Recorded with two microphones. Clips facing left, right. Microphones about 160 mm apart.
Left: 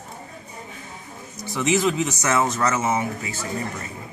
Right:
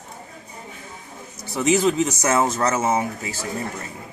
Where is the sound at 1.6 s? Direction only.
40° right (ahead or behind).